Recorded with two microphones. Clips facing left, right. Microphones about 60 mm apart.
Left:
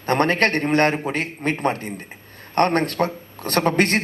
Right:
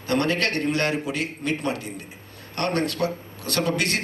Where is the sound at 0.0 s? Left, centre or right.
Left.